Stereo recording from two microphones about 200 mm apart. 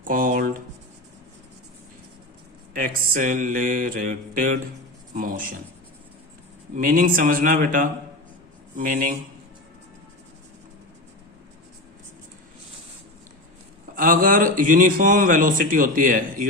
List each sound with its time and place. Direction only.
0.0 s a sound: 45° right (ahead or behind)
2.7 s speech: 45° right (ahead or behind)
6.7 s speech: 45° right (ahead or behind)
13.8 s speech: 45° right (ahead or behind)